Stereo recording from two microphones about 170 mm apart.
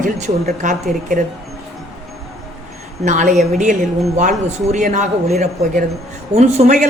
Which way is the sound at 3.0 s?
45° right (ahead or behind).